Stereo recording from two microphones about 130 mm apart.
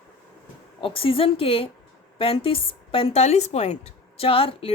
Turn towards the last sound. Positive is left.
turn(degrees=45)  # may be behind; listen again after turning